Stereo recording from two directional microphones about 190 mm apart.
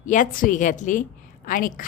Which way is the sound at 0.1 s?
45° left (ahead or behind).